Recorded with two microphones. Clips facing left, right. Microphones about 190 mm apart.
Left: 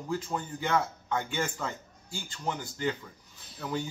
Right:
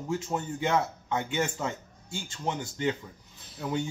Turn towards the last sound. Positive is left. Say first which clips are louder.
# right 3 dB
turn(degrees=-25)  # may be behind; listen again after turning